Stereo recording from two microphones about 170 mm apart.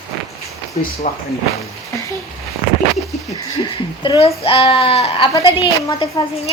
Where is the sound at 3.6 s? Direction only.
30° left (ahead or behind).